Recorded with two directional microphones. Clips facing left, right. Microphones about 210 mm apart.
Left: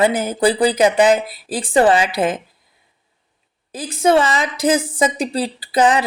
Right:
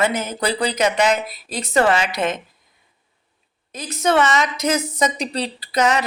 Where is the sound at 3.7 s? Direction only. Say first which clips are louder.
Left 3 dB; 30° left (ahead or behind).